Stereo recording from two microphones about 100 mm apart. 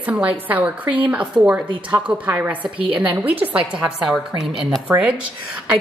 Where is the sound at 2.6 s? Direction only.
60° right (ahead or behind).